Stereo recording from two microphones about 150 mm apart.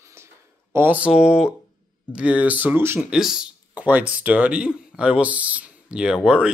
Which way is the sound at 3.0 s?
5° right (ahead or behind).